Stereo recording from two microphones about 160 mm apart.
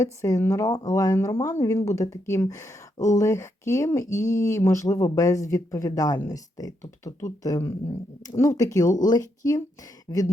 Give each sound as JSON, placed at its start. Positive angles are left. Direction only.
{"t": 0.0, "sound": "speech", "side_deg": 20}